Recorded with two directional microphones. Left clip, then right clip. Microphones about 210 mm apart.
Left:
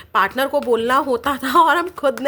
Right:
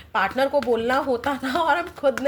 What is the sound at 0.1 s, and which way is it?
A woman's voice, 40° left (ahead or behind).